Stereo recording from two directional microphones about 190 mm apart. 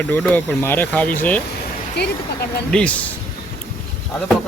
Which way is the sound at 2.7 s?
5° left (ahead or behind).